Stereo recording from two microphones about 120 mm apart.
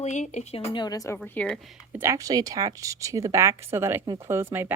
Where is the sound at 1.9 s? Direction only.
20° right (ahead or behind).